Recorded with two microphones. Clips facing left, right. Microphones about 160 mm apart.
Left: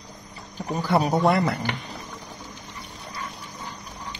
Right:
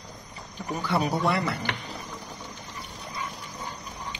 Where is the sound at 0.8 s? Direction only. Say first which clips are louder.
Left 5 dB; 40° left (ahead or behind).